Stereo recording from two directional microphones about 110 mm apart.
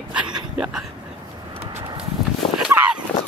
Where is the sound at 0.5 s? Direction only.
10° right (ahead or behind).